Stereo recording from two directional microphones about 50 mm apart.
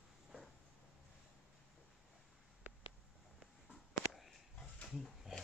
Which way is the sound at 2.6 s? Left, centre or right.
Right.